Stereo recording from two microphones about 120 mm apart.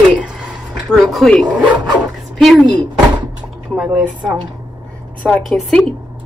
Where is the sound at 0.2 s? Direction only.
5° right (ahead or behind).